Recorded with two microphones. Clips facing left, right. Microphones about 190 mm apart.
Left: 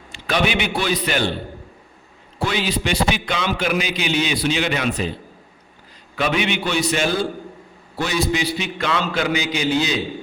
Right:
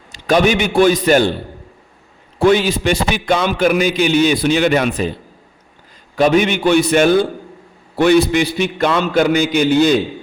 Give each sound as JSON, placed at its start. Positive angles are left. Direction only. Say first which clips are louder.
{"t": 0.1, "sound": "a man's voice", "louder": "right 7 dB", "side_deg": -45}
{"t": 2.4, "sound": "a man's voice", "louder": "right 10 dB", "side_deg": -50}
{"t": 6.1, "sound": "a man's voice", "louder": "right 8 dB", "side_deg": -45}